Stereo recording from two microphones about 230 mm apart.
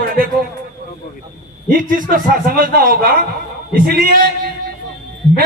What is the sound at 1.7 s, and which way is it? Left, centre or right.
A man's voice, right.